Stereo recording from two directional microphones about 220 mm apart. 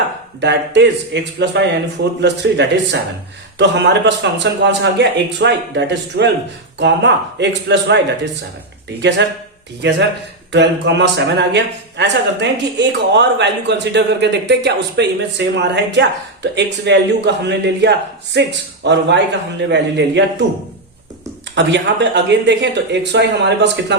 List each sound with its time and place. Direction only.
0.4 s speech: 50° right (ahead or behind)
21.5 s speech: 50° right (ahead or behind)